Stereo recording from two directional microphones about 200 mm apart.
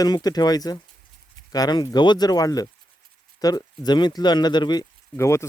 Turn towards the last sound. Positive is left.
turn(degrees=15)  # may be behind; listen again after turning